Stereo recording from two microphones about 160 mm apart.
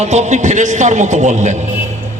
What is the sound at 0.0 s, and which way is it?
A man's voice, 45° right (ahead or behind).